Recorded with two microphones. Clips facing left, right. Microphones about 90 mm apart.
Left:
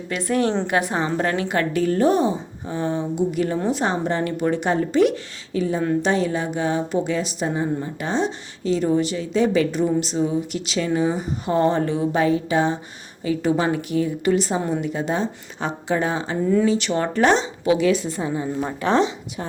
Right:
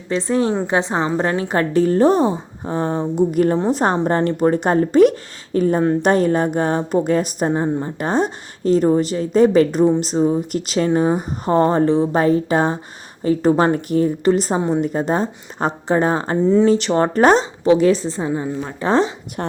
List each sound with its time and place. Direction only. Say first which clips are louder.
0.1 s a woman's voice: right 3 dB; 30° right (ahead or behind); by 16.4 s 45° right (ahead or behind)
16.4 s a woman's voice: right 5 dB; 25° right (ahead or behind)
16.6 s a woman's voice: right 5 dB; 40° right (ahead or behind)